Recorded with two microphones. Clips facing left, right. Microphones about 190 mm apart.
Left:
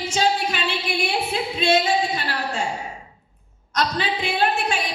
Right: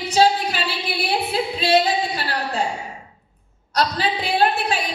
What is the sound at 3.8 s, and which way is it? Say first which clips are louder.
Singing: right 2 dB; 35° right (ahead or behind).